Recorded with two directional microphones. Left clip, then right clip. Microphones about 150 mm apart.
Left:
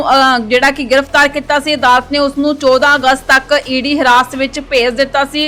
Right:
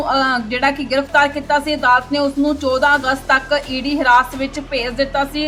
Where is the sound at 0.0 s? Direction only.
50° left (ahead or behind).